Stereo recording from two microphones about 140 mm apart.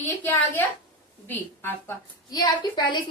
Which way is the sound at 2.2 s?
30° left (ahead or behind).